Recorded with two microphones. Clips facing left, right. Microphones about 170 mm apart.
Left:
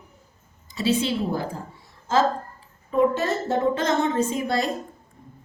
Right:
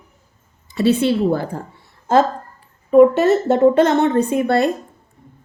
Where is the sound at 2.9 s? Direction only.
65° right (ahead or behind).